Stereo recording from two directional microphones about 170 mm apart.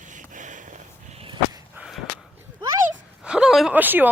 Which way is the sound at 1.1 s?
30° right (ahead or behind).